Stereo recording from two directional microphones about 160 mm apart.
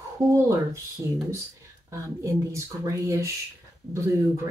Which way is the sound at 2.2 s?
20° right (ahead or behind).